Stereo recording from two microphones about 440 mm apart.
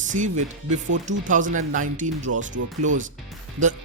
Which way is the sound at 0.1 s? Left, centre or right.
Centre.